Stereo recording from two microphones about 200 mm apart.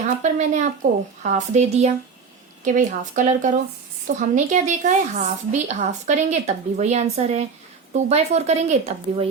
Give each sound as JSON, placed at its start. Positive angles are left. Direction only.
{"t": 0.2, "sound": "a woman's voice", "side_deg": -35}